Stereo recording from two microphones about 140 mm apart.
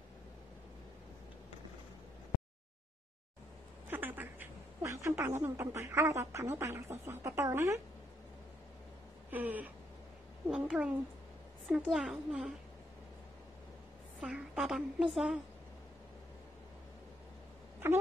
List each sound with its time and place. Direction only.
3.9 s speech: 15° right (ahead or behind)
9.3 s a woman's voice: 10° right (ahead or behind)
14.2 s a woman's voice: 5° right (ahead or behind)
17.8 s a sound: 15° right (ahead or behind)